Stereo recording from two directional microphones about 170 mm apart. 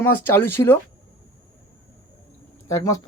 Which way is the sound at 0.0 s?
15° left (ahead or behind).